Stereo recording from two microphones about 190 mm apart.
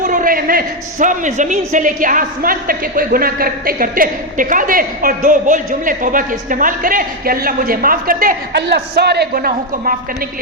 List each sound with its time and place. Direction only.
0.0 s a man's voice: 45° right (ahead or behind)
8.5 s a woman's voice: 60° right (ahead or behind)